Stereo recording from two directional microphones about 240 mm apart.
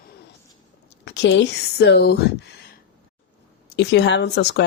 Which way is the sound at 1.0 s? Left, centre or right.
Left.